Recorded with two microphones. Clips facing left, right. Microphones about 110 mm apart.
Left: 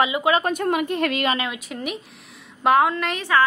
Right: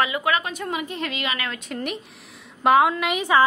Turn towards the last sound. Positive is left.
turn(degrees=-15)  # may be behind; listen again after turning